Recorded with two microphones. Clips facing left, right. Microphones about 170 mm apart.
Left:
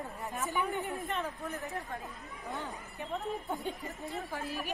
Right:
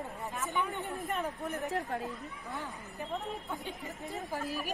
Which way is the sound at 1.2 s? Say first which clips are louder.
Right 2 dB; 15° right (ahead or behind).